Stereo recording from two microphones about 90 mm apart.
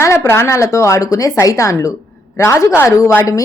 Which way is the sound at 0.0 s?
30° left (ahead or behind).